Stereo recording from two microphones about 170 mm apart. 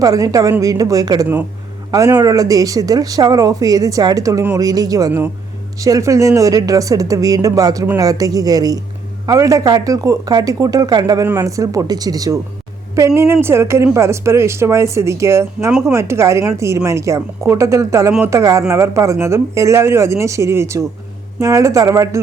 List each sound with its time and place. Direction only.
0.0 s a woman's voice: 20° right (ahead or behind)